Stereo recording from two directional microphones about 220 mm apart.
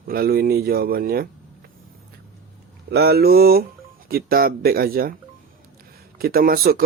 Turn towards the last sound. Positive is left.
turn(degrees=-40)  # may be behind; listen again after turning